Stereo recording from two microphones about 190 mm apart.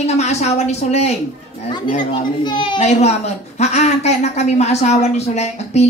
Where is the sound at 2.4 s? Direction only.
25° left (ahead or behind).